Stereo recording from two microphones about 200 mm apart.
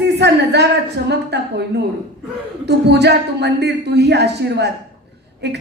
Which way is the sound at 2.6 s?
55° right (ahead or behind).